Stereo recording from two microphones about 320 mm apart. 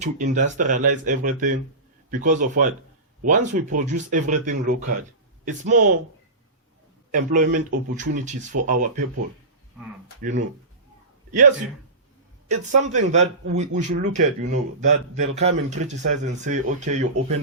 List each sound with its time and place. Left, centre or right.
0.0 s speech: right
7.1 s speech: right
12.5 s speech: right